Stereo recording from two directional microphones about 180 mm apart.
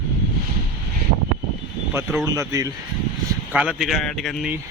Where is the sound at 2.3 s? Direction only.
15° right (ahead or behind).